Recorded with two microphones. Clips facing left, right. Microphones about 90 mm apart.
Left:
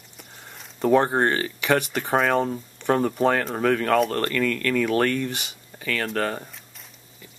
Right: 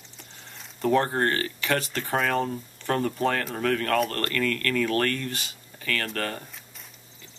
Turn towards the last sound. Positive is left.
turn(degrees=15)  # may be behind; listen again after turning